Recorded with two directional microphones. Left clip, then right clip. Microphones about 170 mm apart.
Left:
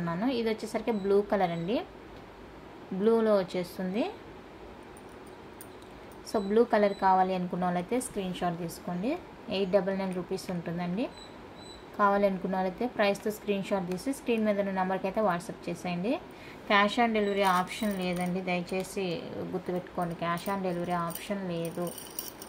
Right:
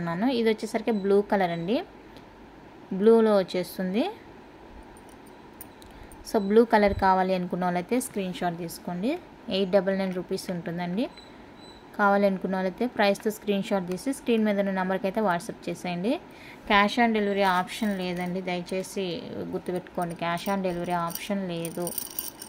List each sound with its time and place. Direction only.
0.0 s a woman's voice: 50° right (ahead or behind)
3.0 s a woman's voice: 45° right (ahead or behind)
6.3 s a woman's voice: 55° right (ahead or behind)